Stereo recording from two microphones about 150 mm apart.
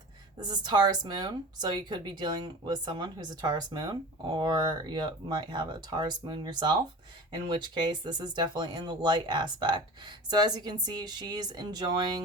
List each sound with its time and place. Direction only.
0.3 s speech: 30° right (ahead or behind)